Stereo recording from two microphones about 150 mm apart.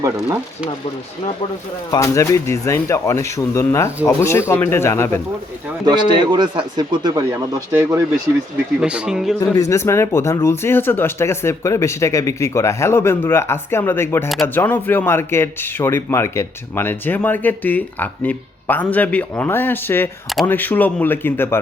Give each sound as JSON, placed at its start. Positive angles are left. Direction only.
{"t": 1.9, "sound": "speech", "side_deg": 20}
{"t": 5.8, "sound": "speech", "side_deg": -30}
{"t": 9.6, "sound": "speech", "side_deg": 20}